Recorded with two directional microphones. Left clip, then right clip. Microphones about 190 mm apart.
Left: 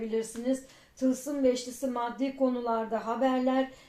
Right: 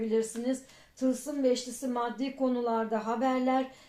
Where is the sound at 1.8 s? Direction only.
35° right (ahead or behind).